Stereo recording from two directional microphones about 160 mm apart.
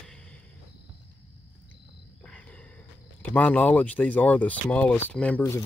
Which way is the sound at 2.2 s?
5° left (ahead or behind).